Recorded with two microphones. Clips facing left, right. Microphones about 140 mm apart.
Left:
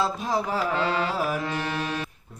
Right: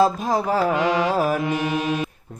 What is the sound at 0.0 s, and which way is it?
Speech, 45° right (ahead or behind).